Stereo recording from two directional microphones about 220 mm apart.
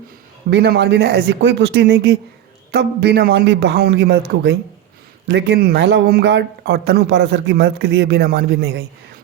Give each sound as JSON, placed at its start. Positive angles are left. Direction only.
{"t": 0.5, "sound": "a man's voice", "side_deg": -45}